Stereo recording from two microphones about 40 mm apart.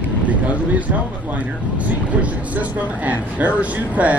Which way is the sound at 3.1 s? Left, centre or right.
Right.